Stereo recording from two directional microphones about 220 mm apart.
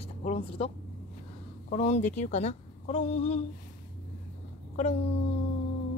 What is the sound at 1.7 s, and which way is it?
Speech, 30° left (ahead or behind).